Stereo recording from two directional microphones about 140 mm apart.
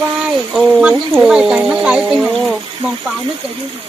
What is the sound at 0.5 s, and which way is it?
Speech, 5° right (ahead or behind).